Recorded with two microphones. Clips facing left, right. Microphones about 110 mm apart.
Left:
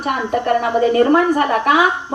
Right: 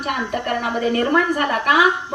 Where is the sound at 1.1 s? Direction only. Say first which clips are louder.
Left 4 dB; 35° left (ahead or behind).